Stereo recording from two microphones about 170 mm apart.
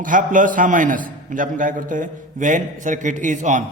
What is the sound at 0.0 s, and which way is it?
A man's voice, 50° right (ahead or behind).